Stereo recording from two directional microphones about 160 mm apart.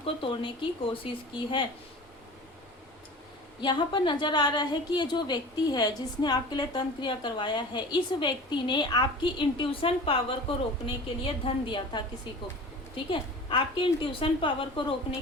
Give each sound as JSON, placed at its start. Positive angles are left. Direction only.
{"t": 0.0, "sound": "a woman's voice", "side_deg": 35}
{"t": 3.6, "sound": "a woman's voice", "side_deg": 30}
{"t": 13.1, "sound": "a woman's voice", "side_deg": 30}